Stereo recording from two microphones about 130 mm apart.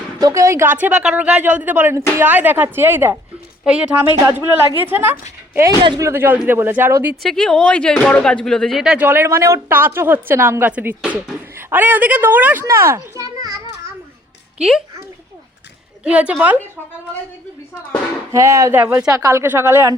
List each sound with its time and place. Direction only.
0.2 s a woman's voice: 25° right (ahead or behind)
7.2 s speech: 5° left (ahead or behind)
9.0 s a woman's voice: 20° right (ahead or behind)
16.0 s a woman's voice: 10° right (ahead or behind)
18.3 s a woman's voice: 25° right (ahead or behind)